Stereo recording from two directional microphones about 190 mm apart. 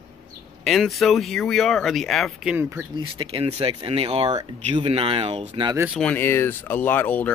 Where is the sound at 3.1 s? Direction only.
30° right (ahead or behind).